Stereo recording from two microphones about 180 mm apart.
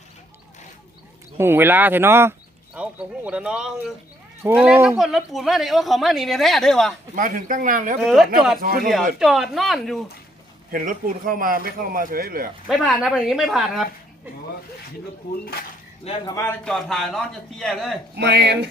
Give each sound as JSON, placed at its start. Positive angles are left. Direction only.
{"t": 1.4, "sound": "speech", "side_deg": -10}
{"t": 7.2, "sound": "a man's voice", "side_deg": -50}
{"t": 8.0, "sound": "speech", "side_deg": 0}
{"t": 8.6, "sound": "a man's voice", "side_deg": -55}
{"t": 9.1, "sound": "speech", "side_deg": 0}
{"t": 10.7, "sound": "a man's voice", "side_deg": -50}
{"t": 12.6, "sound": "speech", "side_deg": 0}
{"t": 15.2, "sound": "speech", "side_deg": 55}
{"t": 16.2, "sound": "speech", "side_deg": 15}
{"t": 18.2, "sound": "speech", "side_deg": -65}